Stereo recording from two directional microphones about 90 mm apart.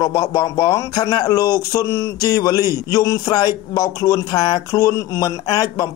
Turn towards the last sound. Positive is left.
turn(degrees=40)  # may be behind; listen again after turning